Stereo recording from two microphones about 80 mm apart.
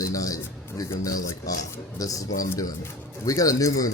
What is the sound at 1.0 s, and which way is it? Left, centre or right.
Speech, left.